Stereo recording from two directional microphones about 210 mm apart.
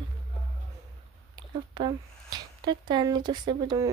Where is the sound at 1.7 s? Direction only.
20° right (ahead or behind).